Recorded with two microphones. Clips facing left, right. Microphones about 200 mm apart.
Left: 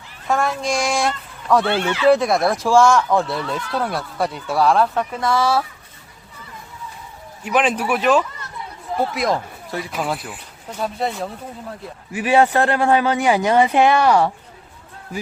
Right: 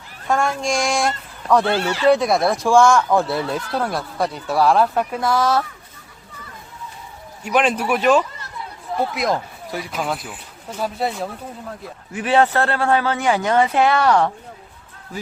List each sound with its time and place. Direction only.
0.3 s speech: centre (ahead or behind)
1.8 s speech: 40° right (ahead or behind)
2.0 s speech: centre (ahead or behind)
7.4 s speech: centre (ahead or behind)
12.1 s speech: 10° left (ahead or behind)